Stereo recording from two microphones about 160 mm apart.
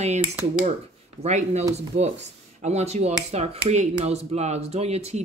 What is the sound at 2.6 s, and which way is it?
Speech, 45° right (ahead or behind).